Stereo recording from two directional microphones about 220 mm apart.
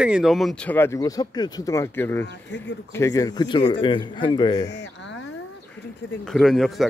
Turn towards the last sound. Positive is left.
turn(degrees=0)  # may be behind; listen again after turning